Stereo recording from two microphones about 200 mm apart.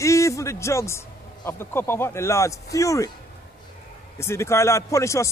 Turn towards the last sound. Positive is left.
turn(degrees=15)  # may be behind; listen again after turning